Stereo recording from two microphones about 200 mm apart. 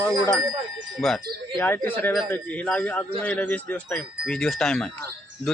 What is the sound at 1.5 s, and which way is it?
Speech, 10° left (ahead or behind).